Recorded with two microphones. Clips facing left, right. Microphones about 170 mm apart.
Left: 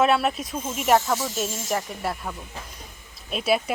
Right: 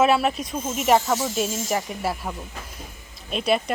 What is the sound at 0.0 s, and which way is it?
Speech, centre (ahead or behind).